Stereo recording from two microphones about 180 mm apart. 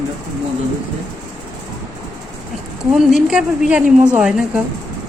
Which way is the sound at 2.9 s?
Centre (ahead or behind).